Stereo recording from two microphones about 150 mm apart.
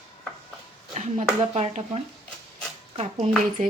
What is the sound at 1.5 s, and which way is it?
Speech, 45° right (ahead or behind).